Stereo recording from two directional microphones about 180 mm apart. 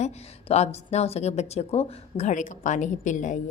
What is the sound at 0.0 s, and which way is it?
A woman's voice, 35° left (ahead or behind).